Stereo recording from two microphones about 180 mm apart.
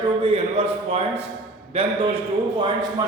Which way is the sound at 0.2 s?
35° right (ahead or behind).